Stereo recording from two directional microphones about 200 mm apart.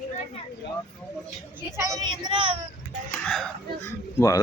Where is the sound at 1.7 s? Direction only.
15° right (ahead or behind).